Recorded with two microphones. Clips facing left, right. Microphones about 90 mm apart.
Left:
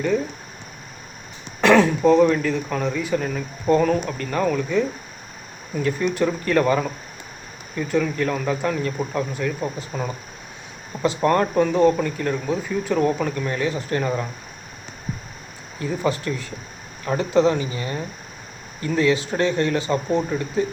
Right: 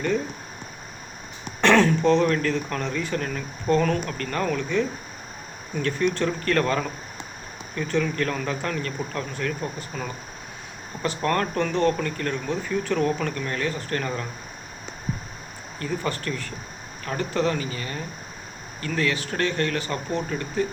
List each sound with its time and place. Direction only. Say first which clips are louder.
1.6 s speech: left 3 dB; 5° left (ahead or behind)
15.8 s speech: left 5 dB; 15° left (ahead or behind)